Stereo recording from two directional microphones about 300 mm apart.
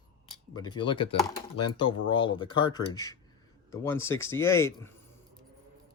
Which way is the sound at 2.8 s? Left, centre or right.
Centre.